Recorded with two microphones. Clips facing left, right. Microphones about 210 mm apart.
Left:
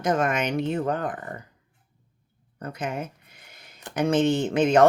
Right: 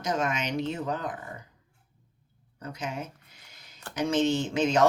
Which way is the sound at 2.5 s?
55° left (ahead or behind).